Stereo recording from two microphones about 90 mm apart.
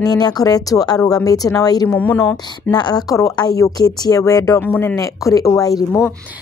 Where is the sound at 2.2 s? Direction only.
45° left (ahead or behind).